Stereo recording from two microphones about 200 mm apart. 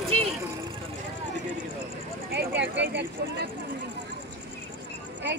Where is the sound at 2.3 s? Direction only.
60° right (ahead or behind).